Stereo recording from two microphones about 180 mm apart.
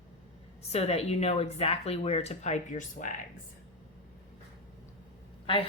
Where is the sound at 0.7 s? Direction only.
35° left (ahead or behind).